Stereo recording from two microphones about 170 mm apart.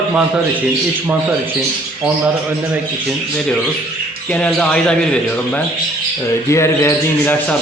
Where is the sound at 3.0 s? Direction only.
5° left (ahead or behind).